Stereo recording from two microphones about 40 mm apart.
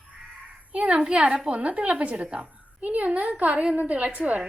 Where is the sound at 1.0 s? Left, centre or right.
Right.